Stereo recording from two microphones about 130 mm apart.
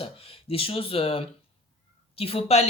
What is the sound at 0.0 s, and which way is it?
Speech, 45° left (ahead or behind).